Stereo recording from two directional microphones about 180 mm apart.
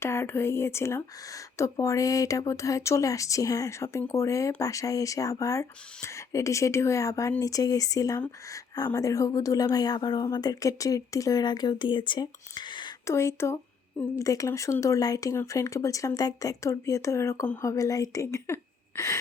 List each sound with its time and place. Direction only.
0.0 s speech: 15° left (ahead or behind)